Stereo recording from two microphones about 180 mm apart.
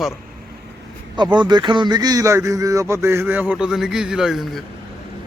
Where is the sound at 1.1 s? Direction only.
25° right (ahead or behind); by 4.6 s centre (ahead or behind).